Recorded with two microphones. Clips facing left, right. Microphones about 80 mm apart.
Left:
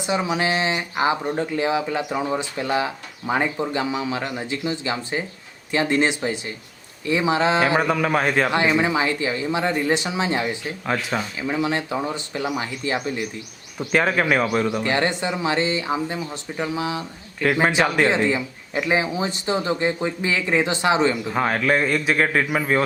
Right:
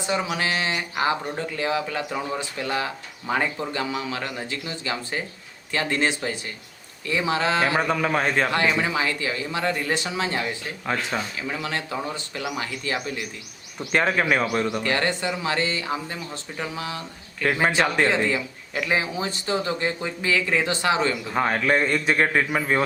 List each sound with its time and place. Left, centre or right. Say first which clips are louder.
0.0 s speech: left 3 dB; centre
7.8 s a man's voice: left 2 dB; centre
8.4 s speech: left 3 dB; centre
11.1 s a man's voice: left 3 dB; centre
11.4 s speech: left 6 dB; centre
13.7 s a man's voice: left 2 dB; centre
14.8 s speech: left 2 dB; centre
17.4 s a man's voice: left 3 dB; centre
18.0 s speech: left 2 dB; centre
21.2 s a man's voice: left 1 dB; centre